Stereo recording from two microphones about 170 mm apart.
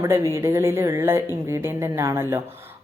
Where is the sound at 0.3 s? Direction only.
15° right (ahead or behind).